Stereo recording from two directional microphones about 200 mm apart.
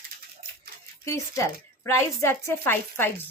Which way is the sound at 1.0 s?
15° left (ahead or behind).